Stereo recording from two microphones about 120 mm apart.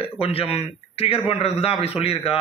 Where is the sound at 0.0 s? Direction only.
55° left (ahead or behind).